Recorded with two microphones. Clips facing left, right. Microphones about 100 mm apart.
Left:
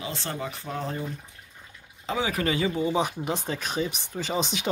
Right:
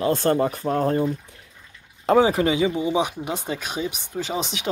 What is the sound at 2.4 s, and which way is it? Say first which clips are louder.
Speech: right 5 dB; 15° right (ahead or behind).